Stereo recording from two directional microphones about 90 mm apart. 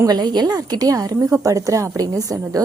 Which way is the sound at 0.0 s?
50° right (ahead or behind).